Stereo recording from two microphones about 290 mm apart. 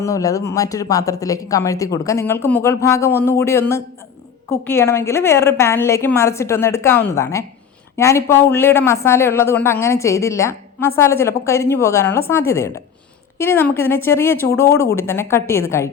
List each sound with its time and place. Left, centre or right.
0.0 s speech: centre